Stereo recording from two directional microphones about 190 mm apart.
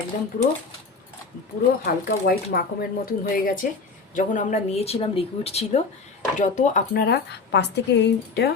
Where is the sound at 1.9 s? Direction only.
55° left (ahead or behind).